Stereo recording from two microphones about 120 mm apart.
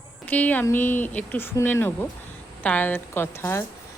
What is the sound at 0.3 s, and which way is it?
Speech, 10° left (ahead or behind).